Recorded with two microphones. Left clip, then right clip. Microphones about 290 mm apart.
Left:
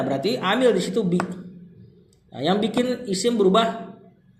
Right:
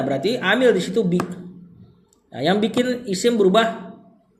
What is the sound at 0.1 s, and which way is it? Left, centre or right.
Speech, centre.